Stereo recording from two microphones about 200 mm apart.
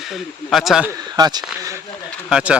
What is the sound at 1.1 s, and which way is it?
Speech, 20° right (ahead or behind).